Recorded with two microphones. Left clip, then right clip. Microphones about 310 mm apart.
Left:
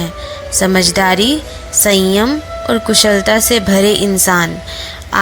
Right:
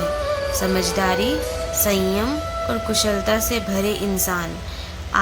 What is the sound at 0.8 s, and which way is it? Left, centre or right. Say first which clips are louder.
A woman's voice: left 10 dB; left.